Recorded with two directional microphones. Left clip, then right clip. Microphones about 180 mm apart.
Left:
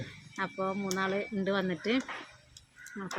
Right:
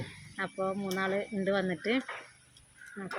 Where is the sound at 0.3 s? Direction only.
15° left (ahead or behind).